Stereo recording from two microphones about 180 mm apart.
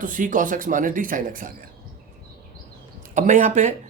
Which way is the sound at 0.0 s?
45° right (ahead or behind).